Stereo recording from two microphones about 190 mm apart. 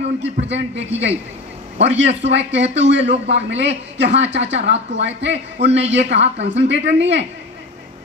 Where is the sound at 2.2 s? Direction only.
70° right (ahead or behind).